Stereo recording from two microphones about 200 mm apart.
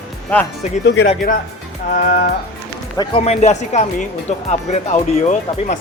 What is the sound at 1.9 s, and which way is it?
Speech, 40° left (ahead or behind).